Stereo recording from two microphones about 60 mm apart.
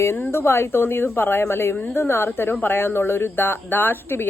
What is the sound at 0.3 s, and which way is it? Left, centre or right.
Speech, left.